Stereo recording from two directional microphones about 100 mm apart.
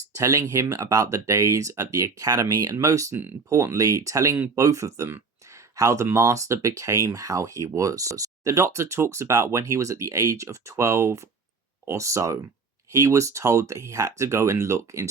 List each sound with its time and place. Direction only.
0.1 s speech: 30° right (ahead or behind)
5.7 s speech: 35° right (ahead or behind)